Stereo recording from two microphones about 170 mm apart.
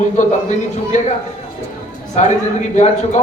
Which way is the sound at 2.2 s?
40° left (ahead or behind).